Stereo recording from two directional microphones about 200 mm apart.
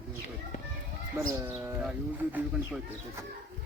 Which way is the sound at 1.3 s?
15° right (ahead or behind).